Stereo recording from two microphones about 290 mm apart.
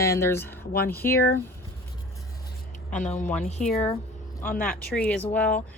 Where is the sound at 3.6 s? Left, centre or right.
Left.